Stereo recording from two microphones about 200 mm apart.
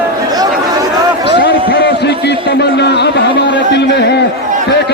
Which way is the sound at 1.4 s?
60° left (ahead or behind).